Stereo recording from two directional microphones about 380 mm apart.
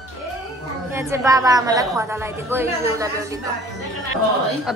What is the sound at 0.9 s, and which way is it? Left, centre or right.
A woman's voice, centre.